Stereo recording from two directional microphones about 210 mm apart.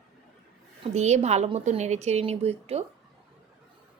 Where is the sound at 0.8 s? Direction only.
30° right (ahead or behind).